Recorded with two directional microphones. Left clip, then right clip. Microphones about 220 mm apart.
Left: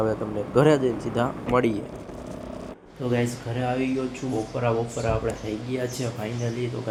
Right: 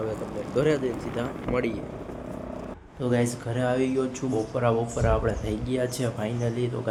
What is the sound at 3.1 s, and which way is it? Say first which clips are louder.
A man's voice: even; 10° right (ahead or behind).